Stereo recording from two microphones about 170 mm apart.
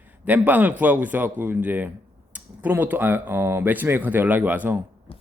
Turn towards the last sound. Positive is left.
turn(degrees=-10)  # may be behind; listen again after turning